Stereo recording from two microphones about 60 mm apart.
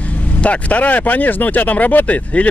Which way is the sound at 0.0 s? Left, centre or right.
Left.